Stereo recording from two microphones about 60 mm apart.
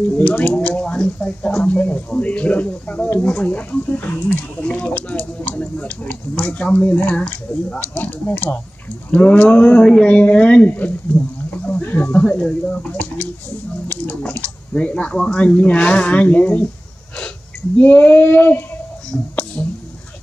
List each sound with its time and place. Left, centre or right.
0.3 s speech: left
4.6 s speech: left
7.9 s female singing: left
9.1 s speech: left
14.0 s a sound: left
14.7 s speech: centre
17.7 s female singing: left
19.1 s speech: centre